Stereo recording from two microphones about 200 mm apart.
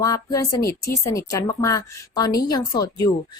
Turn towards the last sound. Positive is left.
turn(degrees=20)  # may be behind; listen again after turning